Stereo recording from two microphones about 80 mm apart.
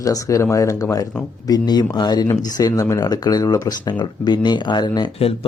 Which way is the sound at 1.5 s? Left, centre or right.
Left.